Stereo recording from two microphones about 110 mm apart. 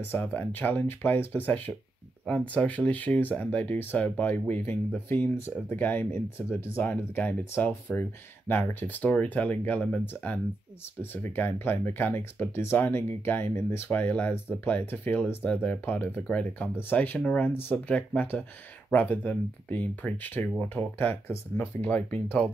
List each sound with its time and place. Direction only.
0.0 s speech: 15° left (ahead or behind)